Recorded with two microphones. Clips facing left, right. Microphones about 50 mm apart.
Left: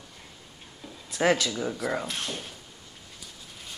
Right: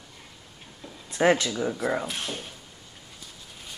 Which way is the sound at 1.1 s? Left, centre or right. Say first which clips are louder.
Right 2 dB; right.